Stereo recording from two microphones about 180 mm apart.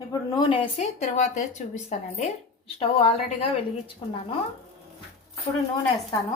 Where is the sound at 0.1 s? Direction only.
25° left (ahead or behind).